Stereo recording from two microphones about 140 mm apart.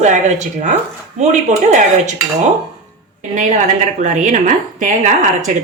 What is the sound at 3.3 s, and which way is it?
A woman's voice, 65° right (ahead or behind).